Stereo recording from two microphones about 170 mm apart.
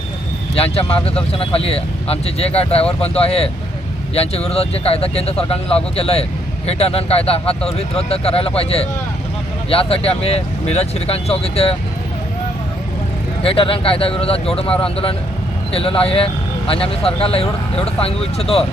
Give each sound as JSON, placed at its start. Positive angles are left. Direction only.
{"t": 0.5, "sound": "speech", "side_deg": 35}
{"t": 13.4, "sound": "speech", "side_deg": 30}